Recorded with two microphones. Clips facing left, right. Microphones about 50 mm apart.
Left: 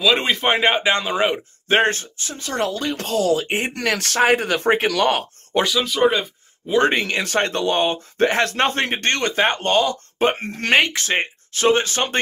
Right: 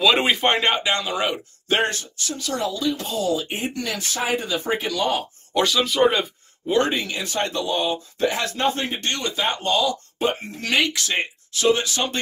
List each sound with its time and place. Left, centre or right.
0.0 s speech: centre
0.5 s speech: centre
0.8 s speech: left
2.5 s speech: left
5.6 s speech: centre
6.9 s speech: left